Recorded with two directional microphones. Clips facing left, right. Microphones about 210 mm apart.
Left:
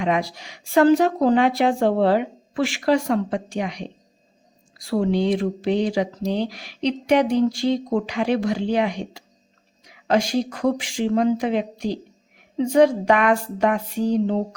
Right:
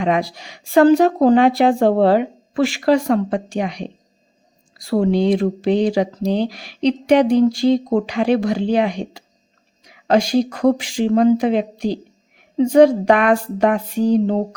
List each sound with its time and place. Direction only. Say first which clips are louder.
0.0 s speech: right 3 dB; 35° right (ahead or behind)